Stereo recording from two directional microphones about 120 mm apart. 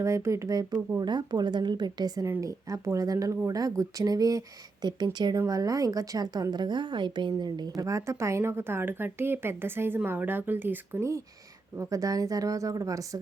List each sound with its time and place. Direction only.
0.0 s a woman's voice: 25° right (ahead or behind)